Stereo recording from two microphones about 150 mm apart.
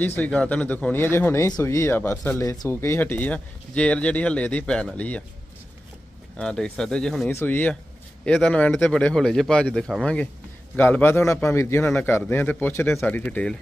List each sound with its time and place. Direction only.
0.0 s speech: 10° left (ahead or behind)
6.3 s speech: 5° left (ahead or behind)
7.2 s speech: 15° left (ahead or behind)